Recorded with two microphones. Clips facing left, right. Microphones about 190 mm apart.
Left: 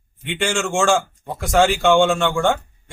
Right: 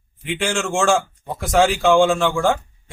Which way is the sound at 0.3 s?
Centre (ahead or behind).